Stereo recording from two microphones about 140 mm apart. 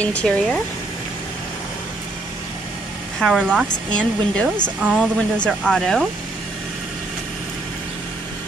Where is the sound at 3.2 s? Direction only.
5° left (ahead or behind).